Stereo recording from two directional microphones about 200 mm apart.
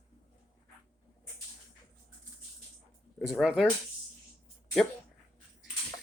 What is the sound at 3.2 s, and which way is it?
Speech, 5° right (ahead or behind).